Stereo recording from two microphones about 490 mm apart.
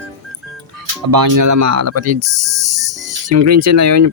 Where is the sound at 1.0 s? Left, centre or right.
Right.